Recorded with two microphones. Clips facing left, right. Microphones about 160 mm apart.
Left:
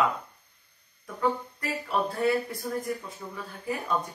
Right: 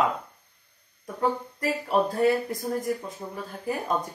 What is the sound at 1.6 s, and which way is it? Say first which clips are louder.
Speech: right 5 dB; 40° right (ahead or behind).